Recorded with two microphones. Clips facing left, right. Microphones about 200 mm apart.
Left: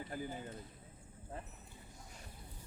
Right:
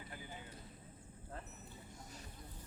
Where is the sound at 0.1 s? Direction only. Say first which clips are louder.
Left 9 dB; 45° left (ahead or behind).